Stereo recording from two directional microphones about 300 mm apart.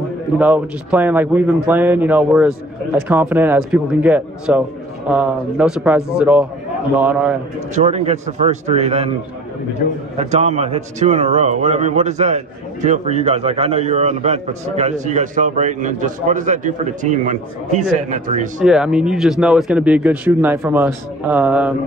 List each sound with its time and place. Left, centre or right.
0.4 s a man's voice: centre
7.7 s a man's voice: right
10.1 s a man's voice: right
18.6 s a man's voice: centre